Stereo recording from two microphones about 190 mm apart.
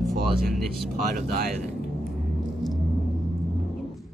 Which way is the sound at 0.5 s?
Centre (ahead or behind).